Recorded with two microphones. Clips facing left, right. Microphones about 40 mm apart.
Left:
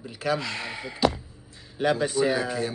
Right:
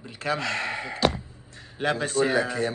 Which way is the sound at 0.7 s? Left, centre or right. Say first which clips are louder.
Left 4 dB; right.